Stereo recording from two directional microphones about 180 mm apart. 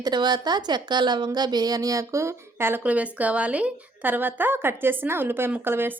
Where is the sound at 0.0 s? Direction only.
25° right (ahead or behind).